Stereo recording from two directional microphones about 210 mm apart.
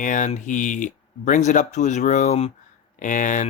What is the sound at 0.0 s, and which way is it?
Speech, 35° left (ahead or behind).